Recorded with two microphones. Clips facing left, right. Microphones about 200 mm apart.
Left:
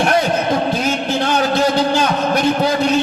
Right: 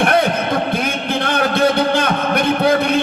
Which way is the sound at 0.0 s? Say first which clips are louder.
Even; 55° right (ahead or behind).